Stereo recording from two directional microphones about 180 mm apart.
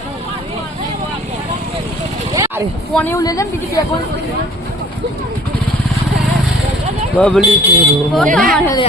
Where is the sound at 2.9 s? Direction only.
10° left (ahead or behind).